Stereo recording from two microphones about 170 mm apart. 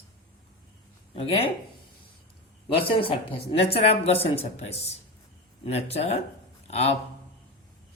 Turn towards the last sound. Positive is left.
turn(degrees=40)  # may be behind; listen again after turning